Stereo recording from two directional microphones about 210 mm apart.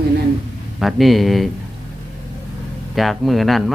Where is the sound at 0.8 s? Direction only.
Centre (ahead or behind).